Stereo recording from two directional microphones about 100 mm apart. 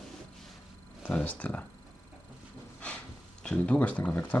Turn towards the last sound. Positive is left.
turn(degrees=15)  # may be behind; listen again after turning